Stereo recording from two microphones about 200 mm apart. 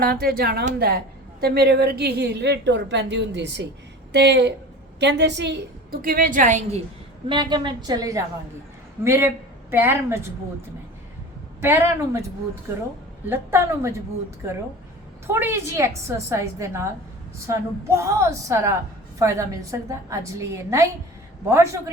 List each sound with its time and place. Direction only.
0.0 s a woman's voice: 50° right (ahead or behind); by 10.2 s 10° right (ahead or behind)
11.6 s a woman's voice: 10° right (ahead or behind)
13.2 s a woman's voice: 10° right (ahead or behind)